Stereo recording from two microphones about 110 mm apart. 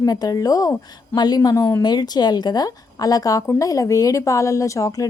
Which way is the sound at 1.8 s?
40° left (ahead or behind).